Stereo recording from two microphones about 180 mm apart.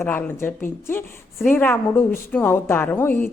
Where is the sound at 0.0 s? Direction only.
15° left (ahead or behind).